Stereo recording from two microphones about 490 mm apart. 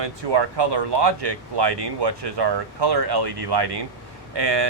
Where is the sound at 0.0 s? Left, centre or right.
Right.